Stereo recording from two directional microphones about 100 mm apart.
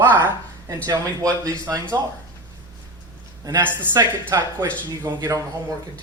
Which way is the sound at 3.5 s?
35° right (ahead or behind).